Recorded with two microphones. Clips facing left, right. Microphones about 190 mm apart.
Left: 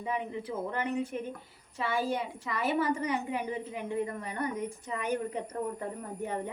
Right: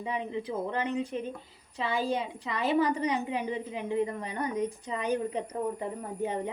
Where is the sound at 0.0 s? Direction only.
20° right (ahead or behind).